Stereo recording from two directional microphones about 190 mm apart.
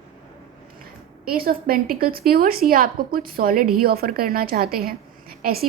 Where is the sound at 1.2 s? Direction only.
50° right (ahead or behind).